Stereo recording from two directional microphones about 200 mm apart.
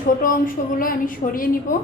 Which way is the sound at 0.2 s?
45° left (ahead or behind).